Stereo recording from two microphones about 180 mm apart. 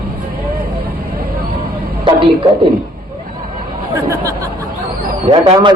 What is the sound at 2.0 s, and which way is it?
Speech, 30° right (ahead or behind).